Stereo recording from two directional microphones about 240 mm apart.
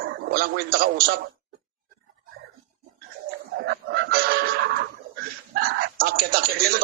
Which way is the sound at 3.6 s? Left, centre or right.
Right.